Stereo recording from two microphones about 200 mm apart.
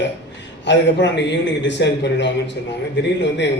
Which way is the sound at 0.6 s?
60° left (ahead or behind).